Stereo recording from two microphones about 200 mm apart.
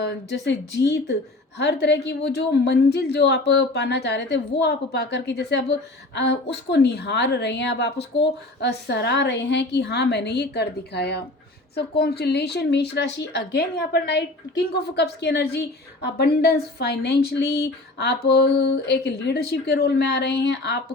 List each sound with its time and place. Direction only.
0.0 s a woman's voice: 60° left (ahead or behind)